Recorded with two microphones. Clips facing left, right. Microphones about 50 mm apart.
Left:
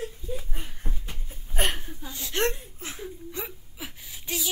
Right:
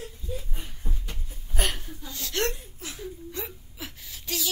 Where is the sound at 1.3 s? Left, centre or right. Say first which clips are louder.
Left 2 dB; left.